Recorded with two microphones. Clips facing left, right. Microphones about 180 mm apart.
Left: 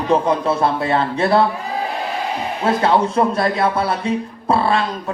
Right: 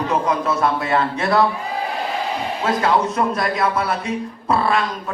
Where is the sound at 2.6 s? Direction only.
30° left (ahead or behind).